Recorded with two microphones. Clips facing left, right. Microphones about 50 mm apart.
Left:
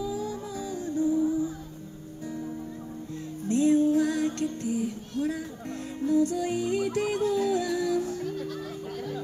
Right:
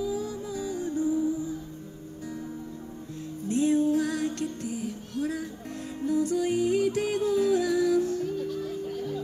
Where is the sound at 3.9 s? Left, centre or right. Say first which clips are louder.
Left 2 dB; left.